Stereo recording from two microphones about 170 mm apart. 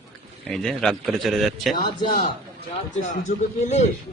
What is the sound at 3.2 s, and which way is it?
Speech, 40° left (ahead or behind).